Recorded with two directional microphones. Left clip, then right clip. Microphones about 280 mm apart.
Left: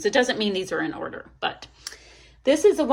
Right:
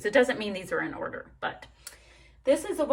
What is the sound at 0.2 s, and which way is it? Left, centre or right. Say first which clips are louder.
A woman's voice: right 1 dB; centre.